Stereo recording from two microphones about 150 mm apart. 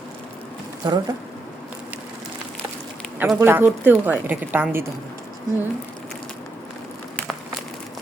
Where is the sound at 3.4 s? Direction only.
15° right (ahead or behind).